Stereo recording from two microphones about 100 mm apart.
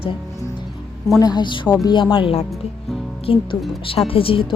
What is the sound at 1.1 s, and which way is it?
A woman's voice, 45° left (ahead or behind).